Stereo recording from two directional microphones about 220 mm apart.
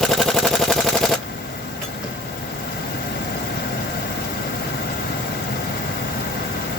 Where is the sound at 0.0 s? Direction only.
Centre (ahead or behind).